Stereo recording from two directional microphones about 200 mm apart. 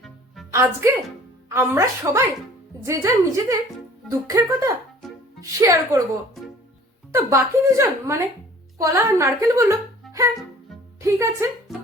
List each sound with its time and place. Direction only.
0.5 s a woman's voice: 15° right (ahead or behind)
7.1 s a woman's voice: 15° right (ahead or behind)
11.0 s a woman's voice: 15° right (ahead or behind)